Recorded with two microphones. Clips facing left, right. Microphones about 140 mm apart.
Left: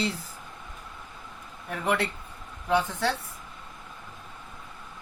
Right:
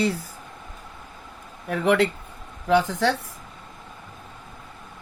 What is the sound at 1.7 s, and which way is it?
Speech, 90° right.